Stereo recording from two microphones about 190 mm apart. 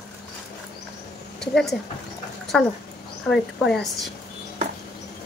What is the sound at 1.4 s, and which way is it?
A woman's voice, centre (ahead or behind).